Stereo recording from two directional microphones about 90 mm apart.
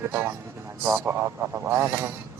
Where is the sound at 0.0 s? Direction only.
25° right (ahead or behind).